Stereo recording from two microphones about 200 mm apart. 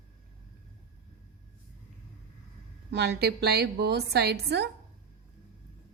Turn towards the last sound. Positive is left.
turn(degrees=-55)  # may be behind; listen again after turning